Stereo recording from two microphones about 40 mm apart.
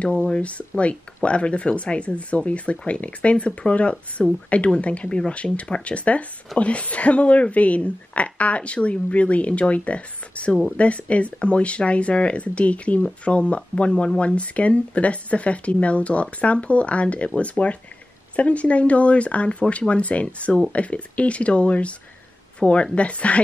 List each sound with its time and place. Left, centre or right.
0.0 s speech: left